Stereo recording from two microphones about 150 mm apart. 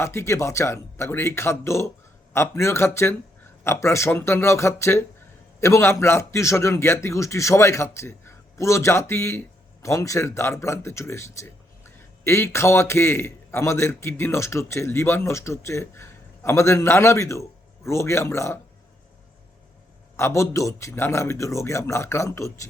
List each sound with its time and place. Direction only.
0.0 s a man's voice: 20° left (ahead or behind)
20.1 s a man's voice: 20° left (ahead or behind)